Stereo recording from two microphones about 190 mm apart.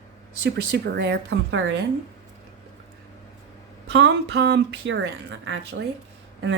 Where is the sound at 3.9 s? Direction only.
65° right (ahead or behind).